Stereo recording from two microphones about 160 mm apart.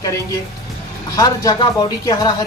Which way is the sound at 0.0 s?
20° left (ahead or behind).